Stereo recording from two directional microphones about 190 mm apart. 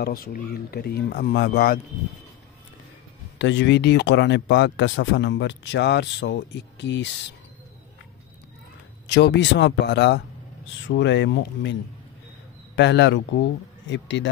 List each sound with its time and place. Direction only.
0.0 s speech: 50° left (ahead or behind)
3.3 s speech: 70° left (ahead or behind)
9.0 s speech: 60° left (ahead or behind)
12.7 s speech: 70° left (ahead or behind)